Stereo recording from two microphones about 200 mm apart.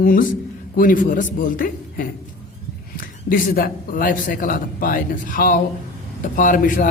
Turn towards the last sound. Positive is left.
turn(degrees=40)  # may be behind; listen again after turning